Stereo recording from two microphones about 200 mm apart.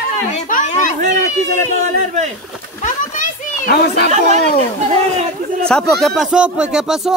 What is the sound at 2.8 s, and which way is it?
Children playing, 40° left (ahead or behind).